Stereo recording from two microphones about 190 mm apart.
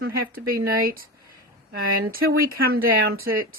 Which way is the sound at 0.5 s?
50° right (ahead or behind).